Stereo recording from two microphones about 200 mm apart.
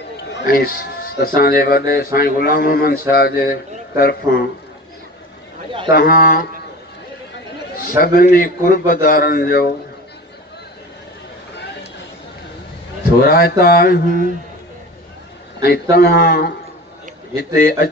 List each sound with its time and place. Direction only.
0.3 s a man's voice: 50° left (ahead or behind)
5.9 s a man's voice: 50° left (ahead or behind)
8.0 s a man's voice: 50° left (ahead or behind)
13.3 s a man's voice: 50° left (ahead or behind)
15.6 s a man's voice: 50° left (ahead or behind)
17.6 s a man's voice: 45° left (ahead or behind)